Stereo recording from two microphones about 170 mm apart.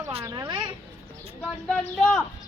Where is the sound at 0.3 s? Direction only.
20° right (ahead or behind).